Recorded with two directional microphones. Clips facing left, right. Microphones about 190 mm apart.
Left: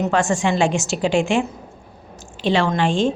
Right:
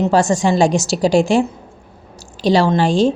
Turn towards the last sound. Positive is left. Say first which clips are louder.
# right 4 dB
turn(degrees=-40)  # may be behind; listen again after turning